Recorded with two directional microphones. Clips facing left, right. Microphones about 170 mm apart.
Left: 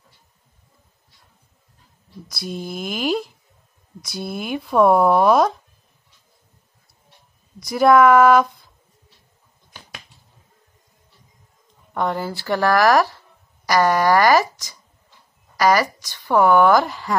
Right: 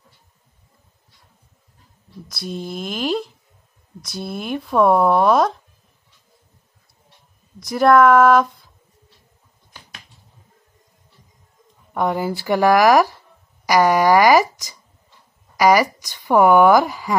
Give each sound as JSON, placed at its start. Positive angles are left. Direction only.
{"t": 2.2, "sound": "speech", "side_deg": 0}
{"t": 7.6, "sound": "speech", "side_deg": 0}
{"t": 11.9, "sound": "speech", "side_deg": -10}